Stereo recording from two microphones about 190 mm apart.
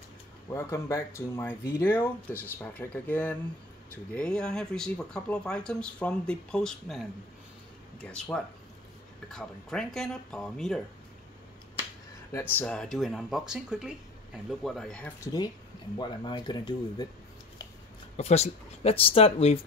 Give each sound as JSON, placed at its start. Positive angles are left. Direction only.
{"t": 0.5, "sound": "speech", "side_deg": 15}
{"t": 12.3, "sound": "speech", "side_deg": 10}
{"t": 16.0, "sound": "speech", "side_deg": 25}
{"t": 18.1, "sound": "speech", "side_deg": 35}